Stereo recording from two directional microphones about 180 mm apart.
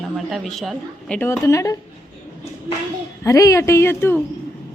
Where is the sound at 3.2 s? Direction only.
15° left (ahead or behind).